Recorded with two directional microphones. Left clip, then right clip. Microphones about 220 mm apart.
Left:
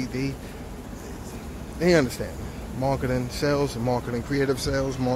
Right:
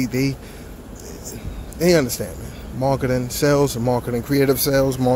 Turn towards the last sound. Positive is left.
turn(degrees=-35)  # may be behind; listen again after turning